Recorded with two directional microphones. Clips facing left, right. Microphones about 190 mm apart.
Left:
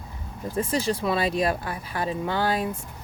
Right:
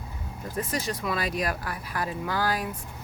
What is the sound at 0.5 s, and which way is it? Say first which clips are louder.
Speech: left 5 dB; 30° left (ahead or behind).